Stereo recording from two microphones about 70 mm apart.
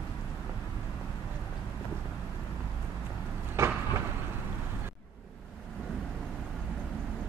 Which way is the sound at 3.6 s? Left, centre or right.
Right.